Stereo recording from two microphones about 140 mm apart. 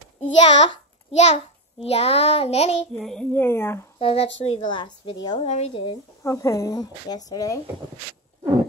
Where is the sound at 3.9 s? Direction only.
45° left (ahead or behind).